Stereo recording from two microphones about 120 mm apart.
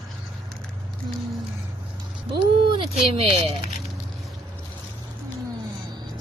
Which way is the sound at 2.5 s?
45° right (ahead or behind).